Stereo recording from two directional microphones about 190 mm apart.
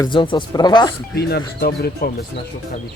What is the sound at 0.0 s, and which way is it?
Speech, 25° left (ahead or behind).